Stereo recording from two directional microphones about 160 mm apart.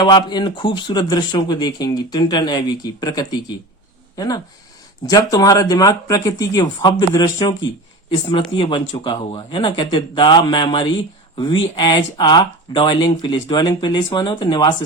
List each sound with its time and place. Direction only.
0.0 s speech: 25° left (ahead or behind)
5.0 s speech: 25° left (ahead or behind)
8.5 s speech: 35° left (ahead or behind)